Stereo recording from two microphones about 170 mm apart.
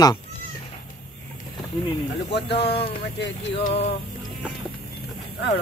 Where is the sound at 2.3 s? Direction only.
75° left (ahead or behind).